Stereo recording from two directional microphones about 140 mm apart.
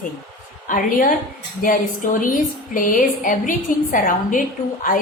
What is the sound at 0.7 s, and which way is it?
Speech, 80° left.